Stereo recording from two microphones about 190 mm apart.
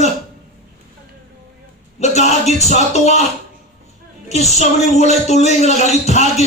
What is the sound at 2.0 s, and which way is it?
Speech, 35° left (ahead or behind).